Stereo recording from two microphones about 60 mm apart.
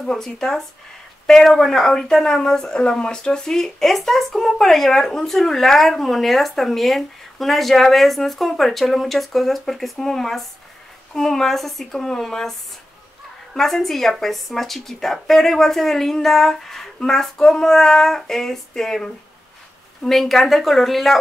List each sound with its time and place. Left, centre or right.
0.0 s speech: centre
13.6 s speech: centre